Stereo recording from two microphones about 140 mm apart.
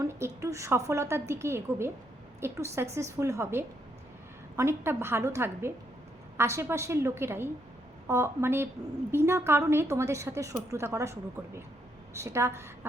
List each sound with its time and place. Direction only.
0.0 s a woman's voice: 20° right (ahead or behind)